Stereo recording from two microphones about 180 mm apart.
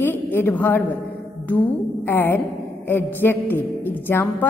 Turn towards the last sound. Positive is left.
turn(degrees=10)  # may be behind; listen again after turning